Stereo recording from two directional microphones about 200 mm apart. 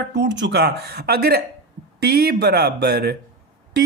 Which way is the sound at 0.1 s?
60° right (ahead or behind).